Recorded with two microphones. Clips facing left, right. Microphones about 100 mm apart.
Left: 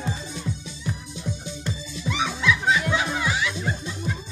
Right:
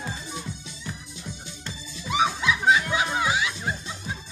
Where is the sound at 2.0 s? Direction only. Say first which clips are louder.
Even; 20° right (ahead or behind).